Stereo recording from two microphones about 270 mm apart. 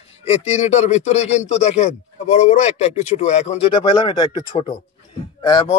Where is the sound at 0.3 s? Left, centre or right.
Left.